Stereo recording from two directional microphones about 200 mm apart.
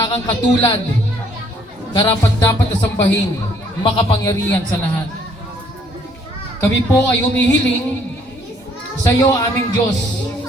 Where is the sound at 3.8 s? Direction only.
25° left (ahead or behind).